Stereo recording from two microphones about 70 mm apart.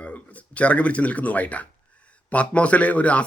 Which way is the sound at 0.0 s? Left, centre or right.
Centre.